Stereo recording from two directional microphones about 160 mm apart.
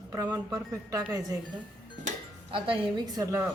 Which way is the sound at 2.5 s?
35° right (ahead or behind).